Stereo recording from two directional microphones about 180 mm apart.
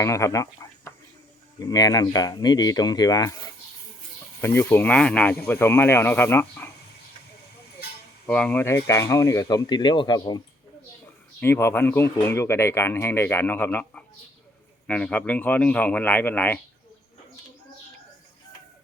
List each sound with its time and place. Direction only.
0.0 s speech: 15° left (ahead or behind)
4.4 s speech: 10° left (ahead or behind)
8.3 s speech: 5° left (ahead or behind); by 10.4 s 25° left (ahead or behind)
11.3 s speech: 10° left (ahead or behind)